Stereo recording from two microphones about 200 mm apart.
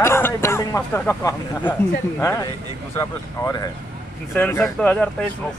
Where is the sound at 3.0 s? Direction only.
15° left (ahead or behind).